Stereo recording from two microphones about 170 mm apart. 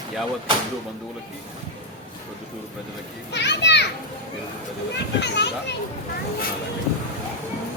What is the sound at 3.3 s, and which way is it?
Children playing, 90° left.